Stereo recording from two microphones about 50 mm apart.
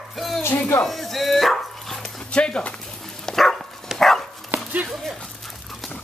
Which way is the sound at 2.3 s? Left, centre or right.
Left.